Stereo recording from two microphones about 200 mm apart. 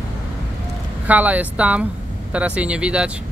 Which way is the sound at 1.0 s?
10° right (ahead or behind).